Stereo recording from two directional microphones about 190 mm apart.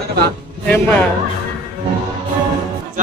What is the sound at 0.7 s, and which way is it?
Speech, 10° left (ahead or behind).